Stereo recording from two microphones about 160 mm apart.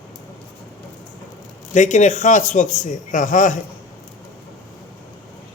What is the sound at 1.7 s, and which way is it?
A man's voice, 50° left (ahead or behind).